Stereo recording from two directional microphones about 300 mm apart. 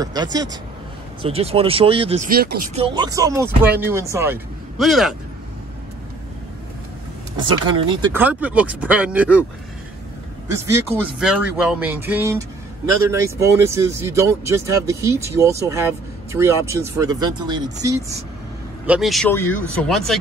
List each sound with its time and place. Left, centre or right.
0.0 s speech: centre; by 2.8 s right
2.8 s speech: centre
7.3 s speech: centre
10.5 s speech: centre
18.9 s speech: centre